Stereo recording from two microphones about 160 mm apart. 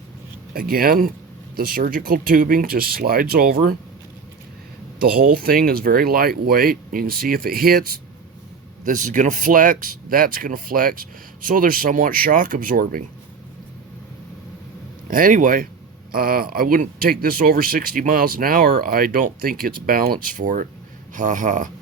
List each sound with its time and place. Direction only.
0.5 s speech: 70° right (ahead or behind)
4.9 s speech: 65° right (ahead or behind)
8.8 s speech: 55° right (ahead or behind)
15.0 s speech: 60° right (ahead or behind)